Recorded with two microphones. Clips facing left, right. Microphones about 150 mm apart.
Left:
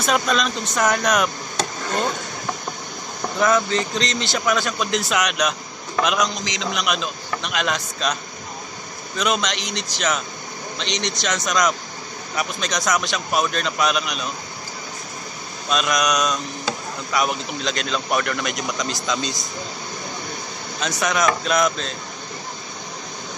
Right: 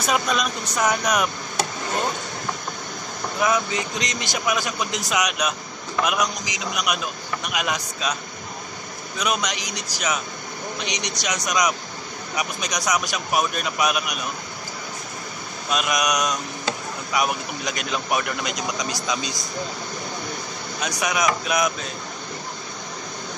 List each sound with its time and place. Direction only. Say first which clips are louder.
0.0 s a man's voice: left 2 dB; 10° right (ahead or behind)
3.3 s a man's voice: left 4 dB; 10° right (ahead or behind)
15.7 s a man's voice: left 2 dB; 15° right (ahead or behind)
21.0 s a man's voice: left 3 dB; 10° right (ahead or behind)